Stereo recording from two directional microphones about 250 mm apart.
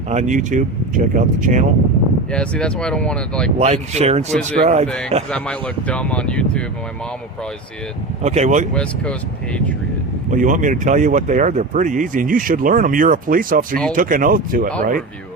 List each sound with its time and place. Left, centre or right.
0.1 s speech: right
2.3 s speech: centre
3.6 s speech: right
4.9 s speech: centre
8.2 s speech: right
8.7 s speech: centre
10.3 s speech: right